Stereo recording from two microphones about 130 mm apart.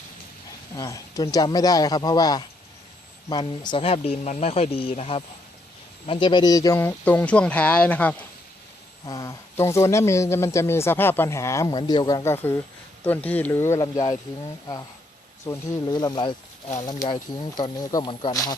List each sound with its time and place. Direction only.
0.8 s speech: 25° left (ahead or behind)
7.0 s speech: 10° left (ahead or behind)
9.0 s speech: 25° left (ahead or behind)
11.7 s speech: 35° left (ahead or behind)
12.2 s speech: 20° left (ahead or behind)
13.8 s speech: 30° left (ahead or behind)
15.4 s speech: 25° left (ahead or behind)